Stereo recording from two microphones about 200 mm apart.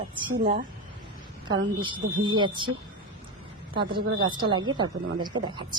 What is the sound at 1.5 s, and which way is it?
Speech, 25° right (ahead or behind).